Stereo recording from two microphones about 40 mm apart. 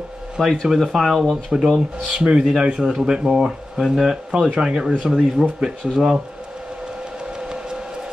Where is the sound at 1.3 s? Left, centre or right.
Centre.